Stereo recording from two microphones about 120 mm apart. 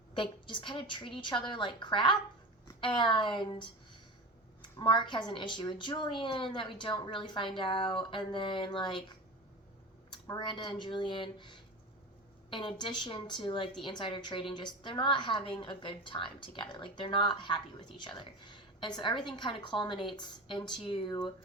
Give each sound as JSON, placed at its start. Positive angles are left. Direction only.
{"t": 0.1, "sound": "a woman's voice", "side_deg": 45}
{"t": 4.8, "sound": "speech", "side_deg": 40}
{"t": 10.3, "sound": "a woman's voice", "side_deg": 40}